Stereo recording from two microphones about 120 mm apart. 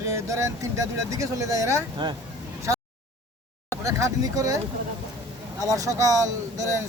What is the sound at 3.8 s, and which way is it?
Speech, 25° right (ahead or behind).